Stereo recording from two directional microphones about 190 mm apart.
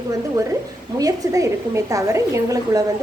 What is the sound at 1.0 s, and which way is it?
A woman's voice, 15° right (ahead or behind).